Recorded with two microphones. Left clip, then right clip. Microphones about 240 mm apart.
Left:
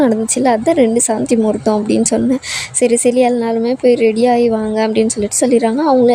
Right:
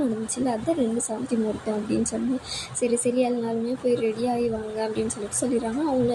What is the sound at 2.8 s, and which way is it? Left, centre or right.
A woman's voice, left.